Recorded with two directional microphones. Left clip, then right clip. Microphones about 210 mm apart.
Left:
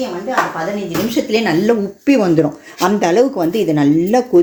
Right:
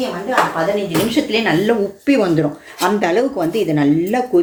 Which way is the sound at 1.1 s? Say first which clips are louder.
Left 3 dB; 50° left (ahead or behind).